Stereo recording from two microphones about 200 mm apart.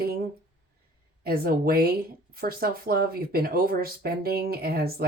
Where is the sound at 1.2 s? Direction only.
50° right (ahead or behind).